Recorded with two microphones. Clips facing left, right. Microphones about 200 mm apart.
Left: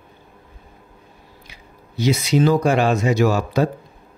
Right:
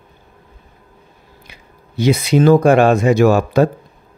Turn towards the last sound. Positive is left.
turn(degrees=-55)  # may be behind; listen again after turning